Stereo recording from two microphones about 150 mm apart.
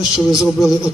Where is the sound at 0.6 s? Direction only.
25° left (ahead or behind).